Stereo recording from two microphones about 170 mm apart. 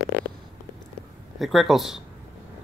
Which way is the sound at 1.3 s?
Centre (ahead or behind).